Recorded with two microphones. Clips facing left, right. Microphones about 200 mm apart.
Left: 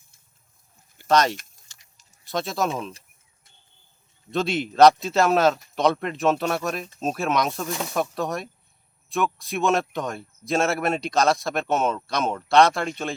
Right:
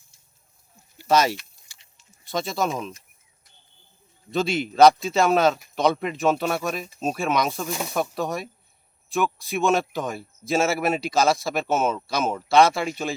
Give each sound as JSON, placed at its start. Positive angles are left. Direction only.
{"t": 1.0, "sound": "speech", "side_deg": -5}
{"t": 1.7, "sound": "a sound", "side_deg": -10}
{"t": 2.2, "sound": "speech", "side_deg": 0}
{"t": 4.3, "sound": "speech", "side_deg": 0}